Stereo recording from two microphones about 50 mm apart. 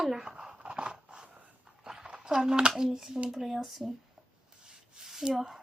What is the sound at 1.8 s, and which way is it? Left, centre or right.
A child's voice, centre.